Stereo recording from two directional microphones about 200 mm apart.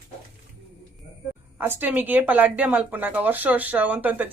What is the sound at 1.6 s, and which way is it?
Speech, 10° right (ahead or behind).